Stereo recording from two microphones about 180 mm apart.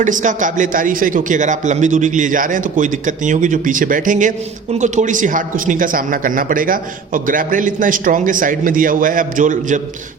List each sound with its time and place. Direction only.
0.0 s a man's voice: 45° right (ahead or behind)